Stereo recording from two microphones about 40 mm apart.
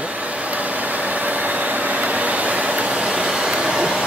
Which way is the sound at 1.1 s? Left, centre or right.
Right.